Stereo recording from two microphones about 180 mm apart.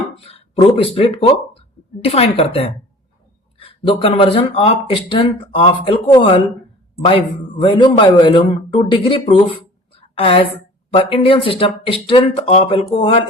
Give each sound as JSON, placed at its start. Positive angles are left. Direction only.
{"t": 0.3, "sound": "speech", "side_deg": 35}
{"t": 9.9, "sound": "a sound", "side_deg": 30}
{"t": 10.9, "sound": "speech", "side_deg": 30}